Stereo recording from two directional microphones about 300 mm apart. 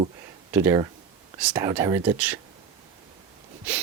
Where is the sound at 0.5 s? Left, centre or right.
Centre.